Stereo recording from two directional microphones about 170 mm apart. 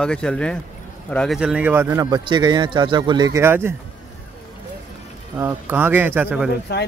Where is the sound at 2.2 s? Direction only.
25° right (ahead or behind).